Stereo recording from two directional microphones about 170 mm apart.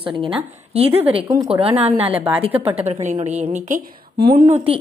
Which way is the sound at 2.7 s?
40° right (ahead or behind).